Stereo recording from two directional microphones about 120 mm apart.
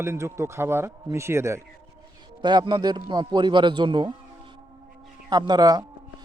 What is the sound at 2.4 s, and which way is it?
A man's voice, 40° right (ahead or behind).